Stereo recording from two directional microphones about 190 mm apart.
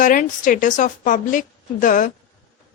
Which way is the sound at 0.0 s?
45° left (ahead or behind).